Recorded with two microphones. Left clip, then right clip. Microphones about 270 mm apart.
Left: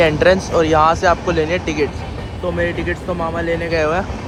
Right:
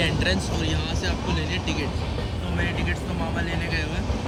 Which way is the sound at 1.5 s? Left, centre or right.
Centre.